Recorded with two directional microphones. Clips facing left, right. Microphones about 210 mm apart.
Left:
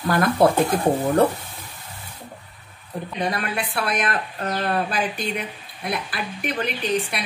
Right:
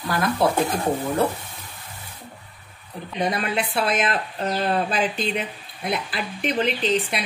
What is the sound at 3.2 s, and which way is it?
Speech, 20° right (ahead or behind).